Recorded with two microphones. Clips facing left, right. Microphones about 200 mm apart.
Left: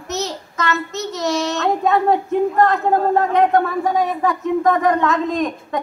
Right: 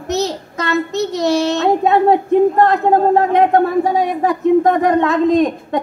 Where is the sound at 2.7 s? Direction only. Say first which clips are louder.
Right 4 dB; 30° right (ahead or behind).